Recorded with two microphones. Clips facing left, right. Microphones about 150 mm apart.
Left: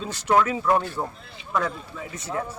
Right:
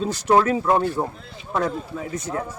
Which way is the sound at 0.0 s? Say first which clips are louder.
Right 3 dB; 35° right (ahead or behind).